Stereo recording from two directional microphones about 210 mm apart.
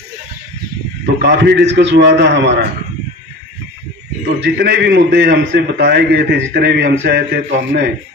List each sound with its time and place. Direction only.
1.2 s a man's voice: 55° right (ahead or behind)
4.4 s a man's voice: 50° right (ahead or behind)